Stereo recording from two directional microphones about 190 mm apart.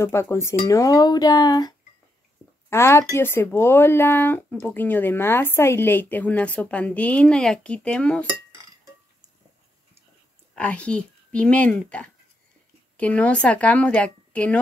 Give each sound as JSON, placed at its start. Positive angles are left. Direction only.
{"t": 0.0, "sound": "speech", "side_deg": 15}
{"t": 10.5, "sound": "speech", "side_deg": 5}